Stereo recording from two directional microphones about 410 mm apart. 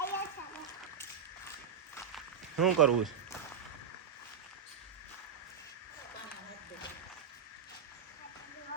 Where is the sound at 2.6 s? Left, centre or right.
Centre.